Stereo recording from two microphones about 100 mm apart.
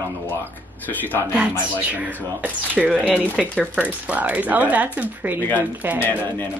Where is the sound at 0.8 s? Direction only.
20° left (ahead or behind).